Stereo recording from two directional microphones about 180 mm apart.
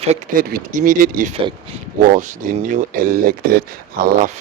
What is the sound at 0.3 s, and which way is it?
Speech, 55° right (ahead or behind).